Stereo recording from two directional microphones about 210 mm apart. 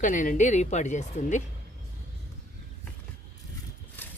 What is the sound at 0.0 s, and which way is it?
Speech, 40° left (ahead or behind).